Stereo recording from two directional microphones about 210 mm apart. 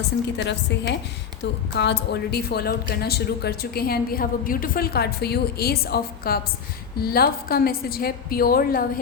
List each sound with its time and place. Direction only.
0.3 s a woman's voice: 55° left (ahead or behind)